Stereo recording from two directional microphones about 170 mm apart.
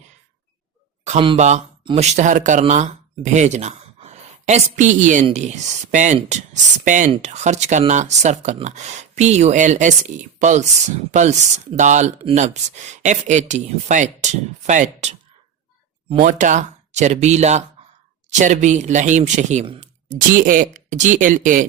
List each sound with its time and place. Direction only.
1.4 s speech: 45° right (ahead or behind)
1.8 s speech: 30° right (ahead or behind)
2.1 s speech: 45° right (ahead or behind)
16.1 s speech: 50° right (ahead or behind)